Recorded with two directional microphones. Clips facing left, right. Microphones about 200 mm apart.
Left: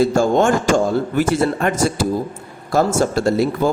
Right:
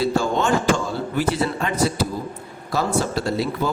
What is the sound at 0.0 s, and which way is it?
A man's voice, 45° left (ahead or behind).